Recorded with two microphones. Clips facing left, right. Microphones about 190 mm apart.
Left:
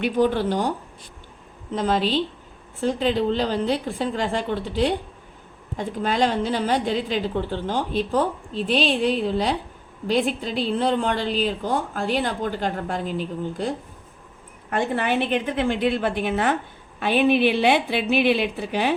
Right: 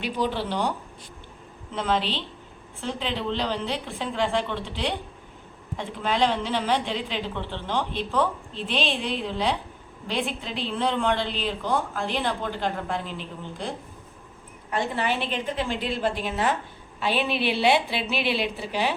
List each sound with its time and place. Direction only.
0.0 s a woman's voice: 50° left (ahead or behind)
1.7 s a woman's voice: 40° left (ahead or behind)
14.7 s a woman's voice: 55° left (ahead or behind)